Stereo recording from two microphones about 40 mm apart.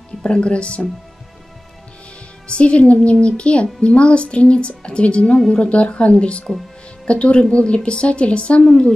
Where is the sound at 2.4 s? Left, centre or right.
Left.